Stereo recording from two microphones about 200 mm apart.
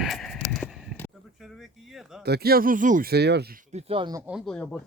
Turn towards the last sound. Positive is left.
turn(degrees=5)  # may be behind; listen again after turning